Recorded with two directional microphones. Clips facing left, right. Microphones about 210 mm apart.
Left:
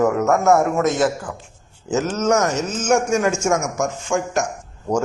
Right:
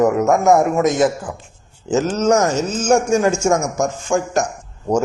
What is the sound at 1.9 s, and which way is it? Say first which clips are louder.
Speech: right 3 dB; 35° right (ahead or behind).